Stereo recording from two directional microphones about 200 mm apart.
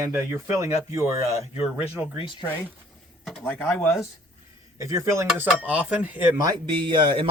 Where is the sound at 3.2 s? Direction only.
Centre (ahead or behind).